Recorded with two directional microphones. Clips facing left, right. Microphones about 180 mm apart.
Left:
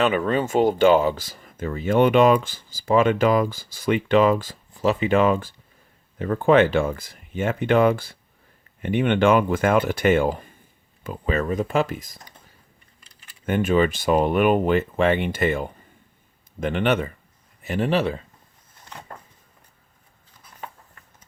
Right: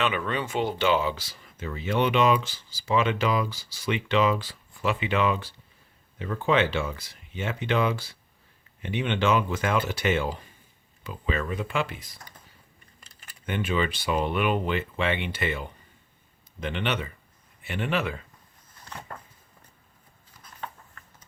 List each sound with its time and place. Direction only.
0.0 s speech: 45° left (ahead or behind)
13.1 s keys jangling: 45° right (ahead or behind)
13.4 s speech: 45° left (ahead or behind)